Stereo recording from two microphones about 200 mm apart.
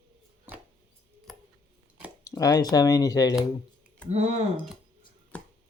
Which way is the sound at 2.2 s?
15° left (ahead or behind).